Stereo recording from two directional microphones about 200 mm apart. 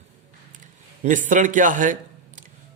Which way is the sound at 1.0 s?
40° right (ahead or behind).